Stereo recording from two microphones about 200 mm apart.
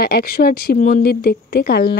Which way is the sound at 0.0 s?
50° left (ahead or behind).